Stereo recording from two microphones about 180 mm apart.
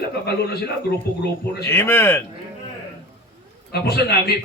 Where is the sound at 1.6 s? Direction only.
15° left (ahead or behind).